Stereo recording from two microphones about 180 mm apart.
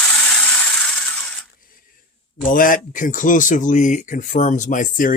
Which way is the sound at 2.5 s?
50° left (ahead or behind).